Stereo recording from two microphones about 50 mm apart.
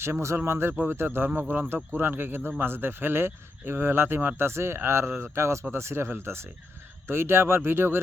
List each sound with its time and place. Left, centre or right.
0.0 s speech: right
0.9 s speech: right
1.7 s speech: right